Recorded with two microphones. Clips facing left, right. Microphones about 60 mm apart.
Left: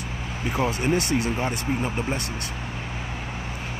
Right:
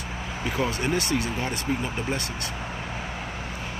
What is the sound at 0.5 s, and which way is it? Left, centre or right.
Speech, left.